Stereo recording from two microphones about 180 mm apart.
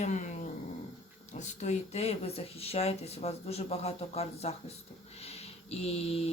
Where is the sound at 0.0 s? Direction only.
40° left (ahead or behind).